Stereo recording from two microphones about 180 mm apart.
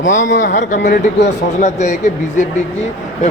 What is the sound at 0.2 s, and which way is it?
Speech, 90° left.